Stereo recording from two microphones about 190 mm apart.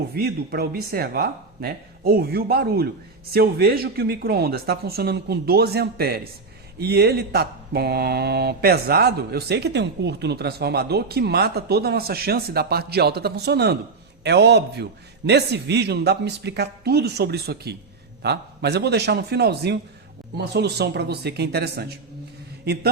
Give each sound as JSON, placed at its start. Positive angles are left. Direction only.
{"t": 0.1, "sound": "speech", "side_deg": -55}